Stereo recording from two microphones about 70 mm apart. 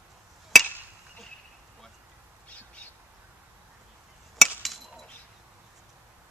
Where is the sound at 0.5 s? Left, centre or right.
Centre.